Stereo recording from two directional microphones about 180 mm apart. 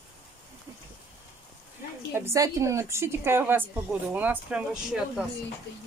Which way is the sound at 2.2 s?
15° right (ahead or behind).